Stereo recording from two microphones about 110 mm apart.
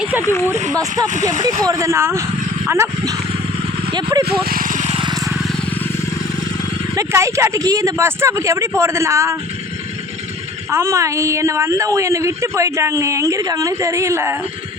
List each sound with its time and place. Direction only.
0.2 s speech: 25° left (ahead or behind)
1.4 s speech: 35° right (ahead or behind)
4.9 s vehicle: 45° right (ahead or behind)
6.9 s speech: 30° right (ahead or behind)
10.7 s speech: 25° right (ahead or behind)